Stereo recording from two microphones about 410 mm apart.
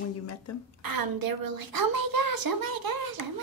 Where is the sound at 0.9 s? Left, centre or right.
Right.